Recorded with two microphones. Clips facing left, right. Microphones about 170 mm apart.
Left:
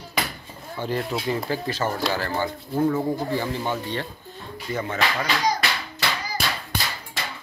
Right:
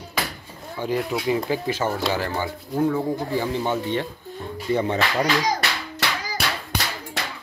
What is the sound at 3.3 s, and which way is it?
Speech, 15° right (ahead or behind).